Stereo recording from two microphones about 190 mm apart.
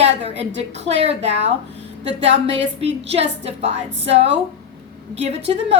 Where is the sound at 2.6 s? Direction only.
70° right (ahead or behind).